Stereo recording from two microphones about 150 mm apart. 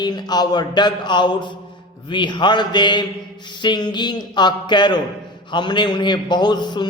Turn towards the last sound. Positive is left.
turn(degrees=30)  # may be behind; listen again after turning